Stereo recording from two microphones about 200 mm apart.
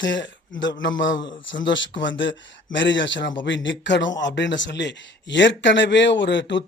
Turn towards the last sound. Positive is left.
turn(degrees=60)  # may be behind; listen again after turning